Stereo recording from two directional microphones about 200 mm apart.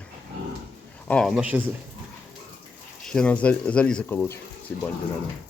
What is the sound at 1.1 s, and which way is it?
Speech, centre (ahead or behind).